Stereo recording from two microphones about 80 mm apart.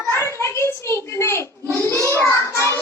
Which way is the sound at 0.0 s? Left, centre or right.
Left.